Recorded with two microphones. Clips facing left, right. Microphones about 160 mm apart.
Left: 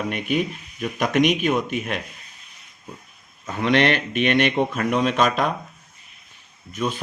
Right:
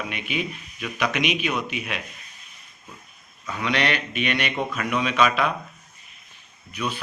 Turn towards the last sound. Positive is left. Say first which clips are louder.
# left 4 dB
turn(degrees=45)  # may be behind; listen again after turning